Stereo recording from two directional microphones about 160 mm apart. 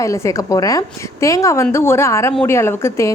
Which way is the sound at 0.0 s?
20° left (ahead or behind).